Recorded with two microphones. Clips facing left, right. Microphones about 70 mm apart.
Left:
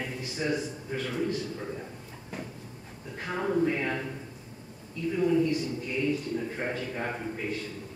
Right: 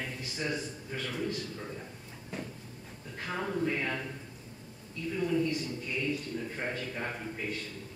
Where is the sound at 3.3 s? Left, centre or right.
Centre.